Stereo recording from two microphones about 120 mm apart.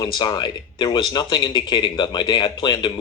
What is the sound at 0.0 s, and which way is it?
Speech, 35° left (ahead or behind).